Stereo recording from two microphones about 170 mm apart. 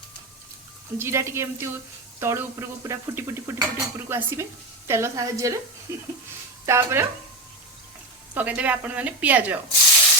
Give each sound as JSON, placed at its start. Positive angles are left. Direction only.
{"t": 0.9, "sound": "speech", "side_deg": -15}
{"t": 8.4, "sound": "speech", "side_deg": -10}